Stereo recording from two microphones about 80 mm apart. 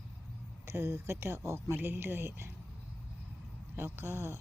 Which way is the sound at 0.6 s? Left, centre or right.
Right.